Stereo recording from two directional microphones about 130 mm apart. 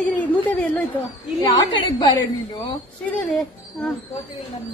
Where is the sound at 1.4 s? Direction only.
35° left (ahead or behind).